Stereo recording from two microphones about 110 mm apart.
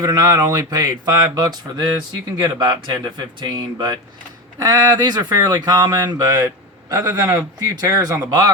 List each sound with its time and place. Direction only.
0.0 s speech: 35° right (ahead or behind)